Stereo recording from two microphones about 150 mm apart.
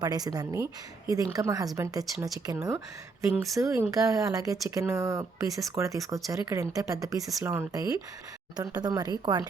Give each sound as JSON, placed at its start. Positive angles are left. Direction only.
{"t": 0.0, "sound": "speech", "side_deg": -25}